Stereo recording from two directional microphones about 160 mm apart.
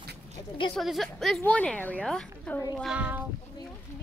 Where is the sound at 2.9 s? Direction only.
10° right (ahead or behind).